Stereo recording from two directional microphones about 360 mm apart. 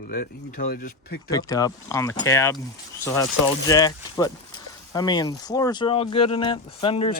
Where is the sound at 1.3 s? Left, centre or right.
Centre.